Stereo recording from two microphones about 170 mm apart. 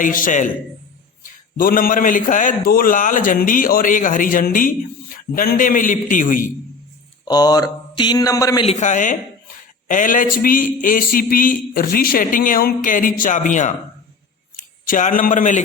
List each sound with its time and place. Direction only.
0.0 s a man's voice: 50° left (ahead or behind)
7.3 s speech: 25° left (ahead or behind)
8.6 s a man's voice: 45° left (ahead or behind)